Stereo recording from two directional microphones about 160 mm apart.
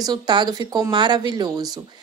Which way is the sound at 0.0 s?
25° right (ahead or behind).